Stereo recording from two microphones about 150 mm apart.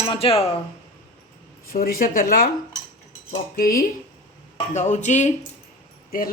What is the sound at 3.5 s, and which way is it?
Speech, 70° left (ahead or behind).